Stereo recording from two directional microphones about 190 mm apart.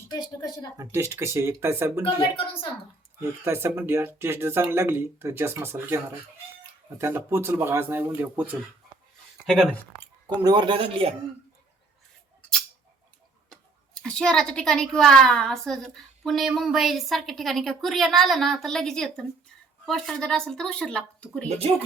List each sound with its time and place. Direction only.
0.1 s speech: 20° left (ahead or behind)
0.8 s speech: 15° right (ahead or behind)
2.1 s speech: 25° left (ahead or behind)
3.4 s speech: 10° right (ahead or behind)
7.0 s speech: 15° right (ahead or behind)
10.2 s a man's voice: 25° right (ahead or behind)
13.5 s a child's voice: 5° left (ahead or behind)